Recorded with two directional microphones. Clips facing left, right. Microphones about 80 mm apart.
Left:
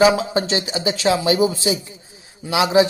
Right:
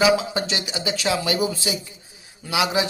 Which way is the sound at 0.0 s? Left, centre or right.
Left.